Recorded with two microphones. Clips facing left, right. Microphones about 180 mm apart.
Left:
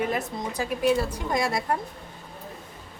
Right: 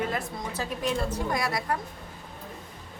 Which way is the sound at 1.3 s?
25° left (ahead or behind).